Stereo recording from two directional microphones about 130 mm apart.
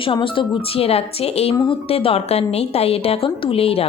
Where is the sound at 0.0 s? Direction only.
40° left (ahead or behind).